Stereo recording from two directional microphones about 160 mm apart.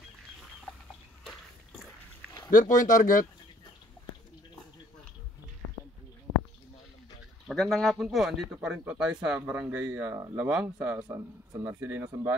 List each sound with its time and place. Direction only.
1.2 s a sound: 5° left (ahead or behind)
2.5 s speech: 55° left (ahead or behind)
7.4 s speech: centre (ahead or behind)
11.0 s speech: 20° right (ahead or behind)